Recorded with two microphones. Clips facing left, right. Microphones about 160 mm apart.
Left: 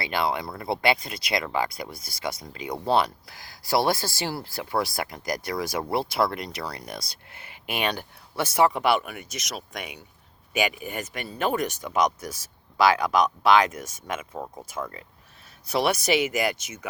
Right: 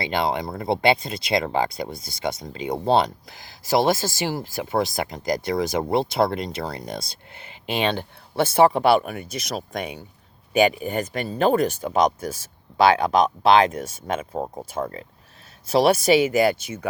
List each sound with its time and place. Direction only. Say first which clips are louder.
0.0 s speech: right 3 dB; 25° right (ahead or behind)